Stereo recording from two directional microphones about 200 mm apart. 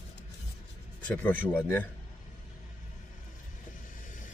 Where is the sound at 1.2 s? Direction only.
10° left (ahead or behind).